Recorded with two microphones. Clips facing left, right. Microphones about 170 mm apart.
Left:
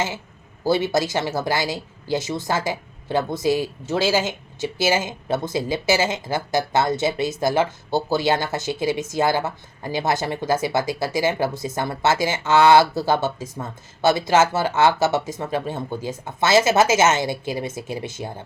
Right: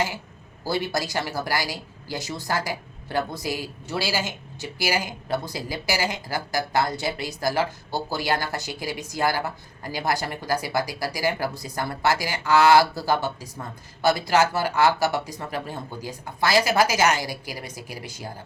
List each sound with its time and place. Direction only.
0.6 s a woman's voice: 20° left (ahead or behind)